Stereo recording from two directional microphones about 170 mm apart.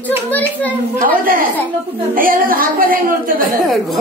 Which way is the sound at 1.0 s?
55° right (ahead or behind).